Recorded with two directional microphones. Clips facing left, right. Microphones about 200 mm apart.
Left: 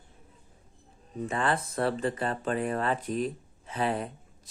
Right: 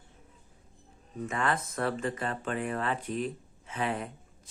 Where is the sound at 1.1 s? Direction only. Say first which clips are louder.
Left 2 dB; 30° left (ahead or behind).